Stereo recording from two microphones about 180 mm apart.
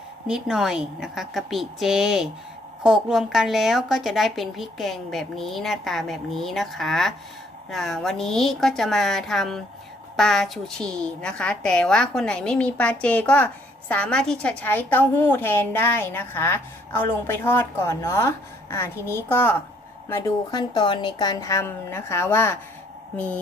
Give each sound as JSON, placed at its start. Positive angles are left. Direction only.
{"t": 0.3, "sound": "a woman's voice", "side_deg": -5}